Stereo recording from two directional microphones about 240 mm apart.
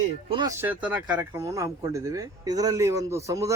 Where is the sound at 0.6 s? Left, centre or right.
Centre.